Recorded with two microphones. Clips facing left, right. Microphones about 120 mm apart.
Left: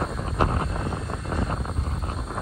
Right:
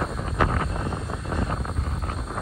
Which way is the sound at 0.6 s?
Centre (ahead or behind).